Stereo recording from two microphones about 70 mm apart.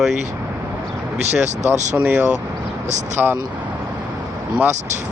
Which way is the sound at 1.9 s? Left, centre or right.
Centre.